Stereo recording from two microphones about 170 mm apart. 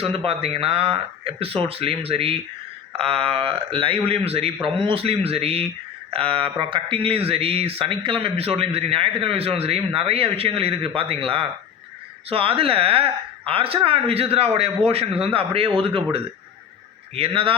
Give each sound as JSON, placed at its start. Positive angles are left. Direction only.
{"t": 0.0, "sound": "speech", "side_deg": -35}